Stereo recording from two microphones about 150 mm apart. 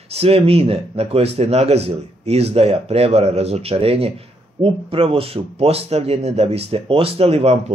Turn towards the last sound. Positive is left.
turn(degrees=-45)  # may be behind; listen again after turning